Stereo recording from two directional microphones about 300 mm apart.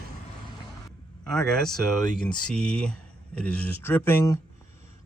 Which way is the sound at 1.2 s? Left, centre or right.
Centre.